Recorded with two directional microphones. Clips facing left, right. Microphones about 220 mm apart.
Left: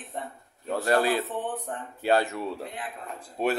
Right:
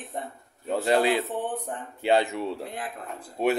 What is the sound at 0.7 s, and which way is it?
A man's voice, 20° right (ahead or behind).